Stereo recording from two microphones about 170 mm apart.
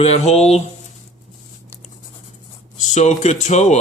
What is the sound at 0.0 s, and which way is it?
Speech, 40° left (ahead or behind).